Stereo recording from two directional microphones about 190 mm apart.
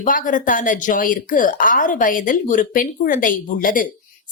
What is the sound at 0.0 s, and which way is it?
A woman's voice, 45° left (ahead or behind).